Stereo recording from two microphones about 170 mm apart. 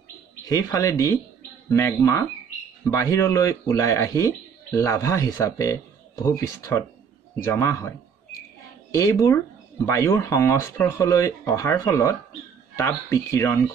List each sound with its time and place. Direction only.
0.5 s speech: 20° left (ahead or behind)
8.9 s speech: 20° left (ahead or behind)